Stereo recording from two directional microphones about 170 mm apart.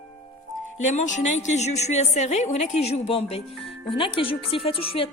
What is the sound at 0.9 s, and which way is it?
A woman's voice, 45° left (ahead or behind).